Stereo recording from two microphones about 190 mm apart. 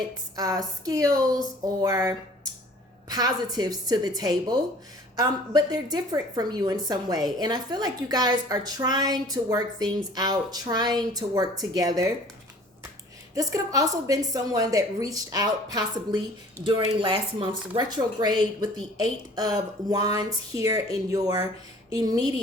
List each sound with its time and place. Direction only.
0.3 s a woman's voice: 20° right (ahead or behind)
13.3 s a woman's voice: 20° right (ahead or behind)